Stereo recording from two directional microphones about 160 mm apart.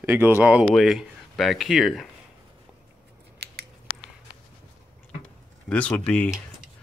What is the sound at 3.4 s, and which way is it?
Scissors, 90° right.